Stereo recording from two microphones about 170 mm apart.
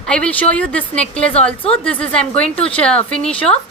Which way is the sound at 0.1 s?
5° left (ahead or behind).